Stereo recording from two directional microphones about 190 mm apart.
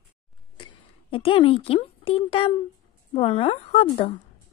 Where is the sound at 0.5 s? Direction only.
30° left (ahead or behind).